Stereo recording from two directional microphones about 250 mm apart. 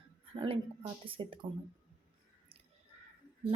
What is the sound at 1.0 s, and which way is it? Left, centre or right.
Speech, right.